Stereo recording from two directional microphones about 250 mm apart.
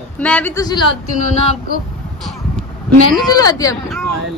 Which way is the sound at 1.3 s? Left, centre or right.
Left.